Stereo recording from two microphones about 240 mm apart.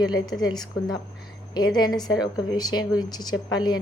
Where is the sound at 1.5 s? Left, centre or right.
Centre.